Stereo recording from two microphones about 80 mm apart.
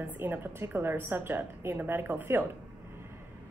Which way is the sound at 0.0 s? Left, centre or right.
Right.